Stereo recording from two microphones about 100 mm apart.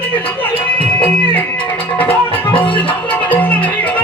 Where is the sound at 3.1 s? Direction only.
15° left (ahead or behind).